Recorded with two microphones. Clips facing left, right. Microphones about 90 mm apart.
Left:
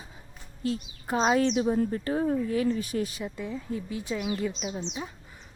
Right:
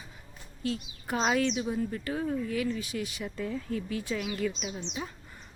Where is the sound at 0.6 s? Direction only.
30° left (ahead or behind).